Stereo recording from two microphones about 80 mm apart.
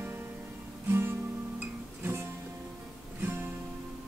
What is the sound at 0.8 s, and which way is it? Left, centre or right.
Guitar, right.